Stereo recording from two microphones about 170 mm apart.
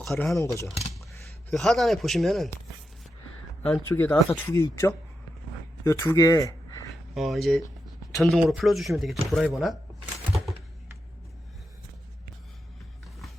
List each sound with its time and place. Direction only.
0.0 s speech: centre (ahead or behind)
0.3 s speech: 20° left (ahead or behind)
1.5 s speech: centre (ahead or behind)
3.6 s speech: 10° left (ahead or behind)
7.1 s speech: centre (ahead or behind)